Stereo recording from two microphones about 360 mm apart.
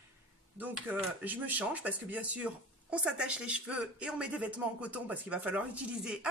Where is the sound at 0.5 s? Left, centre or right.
Centre.